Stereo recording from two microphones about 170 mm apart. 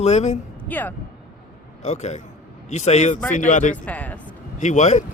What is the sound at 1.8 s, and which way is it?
Speech, 40° left (ahead or behind).